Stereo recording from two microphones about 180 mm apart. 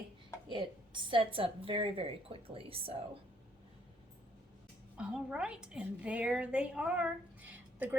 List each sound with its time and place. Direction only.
0.5 s a woman's voice: 25° right (ahead or behind)
4.9 s a woman's voice: 5° right (ahead or behind)